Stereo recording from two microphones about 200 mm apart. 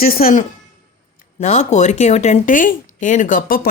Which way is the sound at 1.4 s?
35° left (ahead or behind).